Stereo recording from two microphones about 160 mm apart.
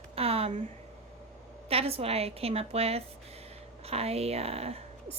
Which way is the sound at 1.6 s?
40° right (ahead or behind).